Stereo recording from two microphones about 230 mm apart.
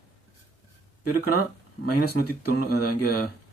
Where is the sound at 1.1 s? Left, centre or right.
Left.